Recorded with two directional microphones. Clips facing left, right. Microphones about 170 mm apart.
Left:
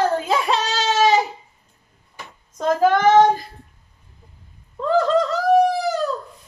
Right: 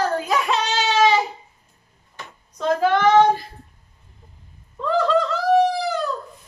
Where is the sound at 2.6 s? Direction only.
45° left (ahead or behind).